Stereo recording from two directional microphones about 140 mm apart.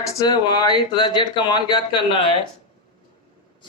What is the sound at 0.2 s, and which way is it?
Speech, 30° left (ahead or behind).